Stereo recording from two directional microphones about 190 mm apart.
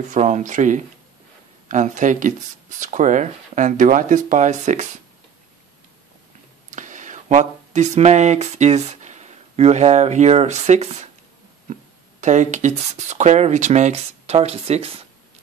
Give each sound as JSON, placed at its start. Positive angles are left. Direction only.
{"t": 0.1, "sound": "speech", "side_deg": -40}
{"t": 6.7, "sound": "speech", "side_deg": -40}
{"t": 12.2, "sound": "speech", "side_deg": -40}